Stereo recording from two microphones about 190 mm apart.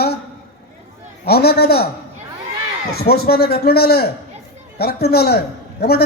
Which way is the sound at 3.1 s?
55° left (ahead or behind).